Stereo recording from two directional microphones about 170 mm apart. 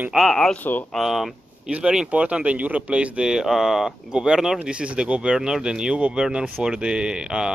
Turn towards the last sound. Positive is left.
turn(degrees=-5)  # may be behind; listen again after turning